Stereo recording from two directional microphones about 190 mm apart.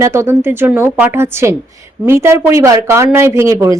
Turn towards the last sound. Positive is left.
turn(degrees=-15)  # may be behind; listen again after turning